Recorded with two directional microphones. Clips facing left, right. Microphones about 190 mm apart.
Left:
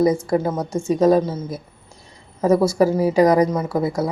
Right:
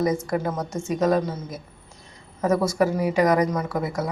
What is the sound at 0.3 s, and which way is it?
A woman's voice, 30° left (ahead or behind).